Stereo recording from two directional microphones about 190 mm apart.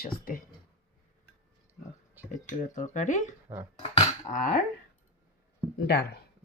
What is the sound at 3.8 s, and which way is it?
Speech, 40° left (ahead or behind).